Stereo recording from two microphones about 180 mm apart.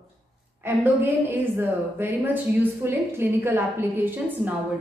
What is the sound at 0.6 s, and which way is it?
A woman's voice, 10° right (ahead or behind).